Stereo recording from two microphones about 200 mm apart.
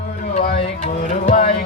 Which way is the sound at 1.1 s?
40° left (ahead or behind).